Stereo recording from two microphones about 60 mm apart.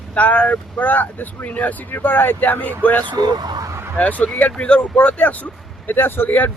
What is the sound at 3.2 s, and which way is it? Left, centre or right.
Speech, right.